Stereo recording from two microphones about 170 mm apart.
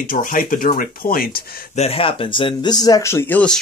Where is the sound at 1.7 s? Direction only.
35° left (ahead or behind); by 3.6 s 10° left (ahead or behind).